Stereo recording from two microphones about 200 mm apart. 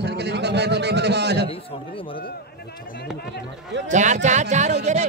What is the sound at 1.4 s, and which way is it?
Speech, 25° left (ahead or behind).